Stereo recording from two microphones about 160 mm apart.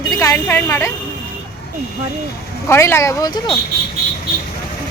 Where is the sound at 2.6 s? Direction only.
15° left (ahead or behind).